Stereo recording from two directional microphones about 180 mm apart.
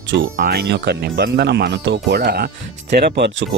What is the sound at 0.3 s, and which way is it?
Speech, 60° right (ahead or behind).